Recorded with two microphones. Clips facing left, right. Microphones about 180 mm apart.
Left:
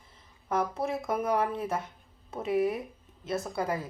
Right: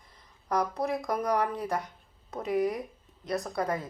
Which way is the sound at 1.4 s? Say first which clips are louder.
Even; 25° left (ahead or behind).